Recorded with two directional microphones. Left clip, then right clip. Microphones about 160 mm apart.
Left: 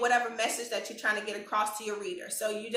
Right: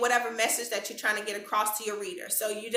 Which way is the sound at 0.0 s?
10° right (ahead or behind).